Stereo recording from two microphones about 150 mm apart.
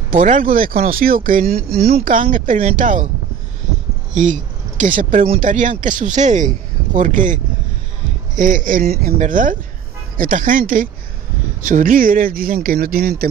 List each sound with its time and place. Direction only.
0.1 s speech: 60° right (ahead or behind); by 1.8 s 80° right
2.0 s speech: 60° right (ahead or behind)
4.1 s speech: 55° right (ahead or behind)
8.4 s speech: 60° right (ahead or behind); by 9.2 s 85° right
9.2 s speech: 60° right (ahead or behind); by 13.3 s 90° right